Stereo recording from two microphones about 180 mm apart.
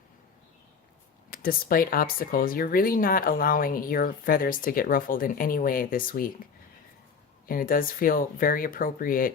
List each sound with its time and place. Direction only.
1.3 s speech: 55° left (ahead or behind)
7.4 s speech: 50° left (ahead or behind)